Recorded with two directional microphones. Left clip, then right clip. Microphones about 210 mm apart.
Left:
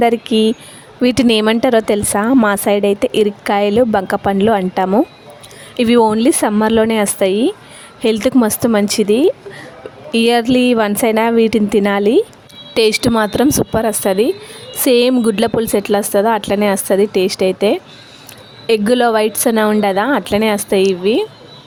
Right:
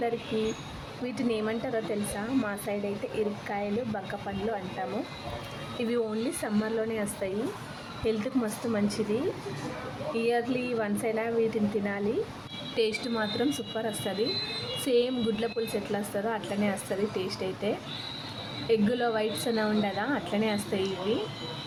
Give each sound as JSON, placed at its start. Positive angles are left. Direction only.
{"t": 1.0, "sound": "speech", "side_deg": 50}
{"t": 10.2, "sound": "a woman's voice", "side_deg": 55}